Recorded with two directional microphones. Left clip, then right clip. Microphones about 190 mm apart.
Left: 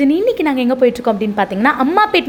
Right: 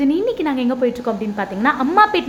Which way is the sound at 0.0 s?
20° left (ahead or behind).